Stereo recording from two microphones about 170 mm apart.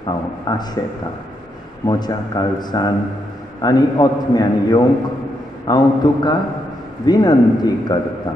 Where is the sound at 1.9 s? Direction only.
25° left (ahead or behind).